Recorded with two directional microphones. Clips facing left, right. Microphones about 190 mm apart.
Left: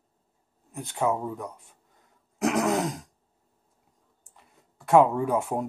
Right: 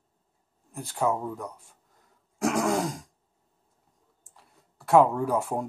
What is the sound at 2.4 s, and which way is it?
Throat clearing, 5° left (ahead or behind).